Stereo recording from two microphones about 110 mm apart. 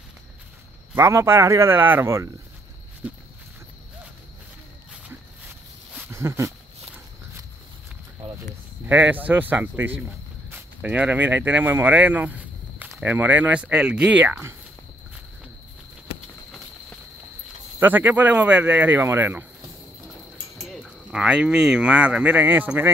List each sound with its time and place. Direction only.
0.9 s speech: 25° right (ahead or behind)
6.1 s a sound: 25° right (ahead or behind)
8.8 s speech: 15° right (ahead or behind)
17.7 s speech: 15° right (ahead or behind)
20.6 s speech: centre (ahead or behind)